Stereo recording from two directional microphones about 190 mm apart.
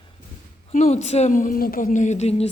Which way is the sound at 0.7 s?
35° left (ahead or behind).